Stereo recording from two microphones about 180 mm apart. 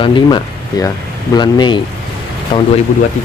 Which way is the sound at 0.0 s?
25° left (ahead or behind).